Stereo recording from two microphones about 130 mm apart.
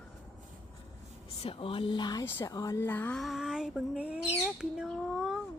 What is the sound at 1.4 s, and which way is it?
Speech, 45° left (ahead or behind).